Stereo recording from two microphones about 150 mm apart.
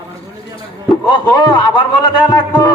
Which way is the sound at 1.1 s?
30° left (ahead or behind).